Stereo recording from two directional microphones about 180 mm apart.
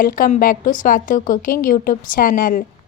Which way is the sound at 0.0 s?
50° left (ahead or behind).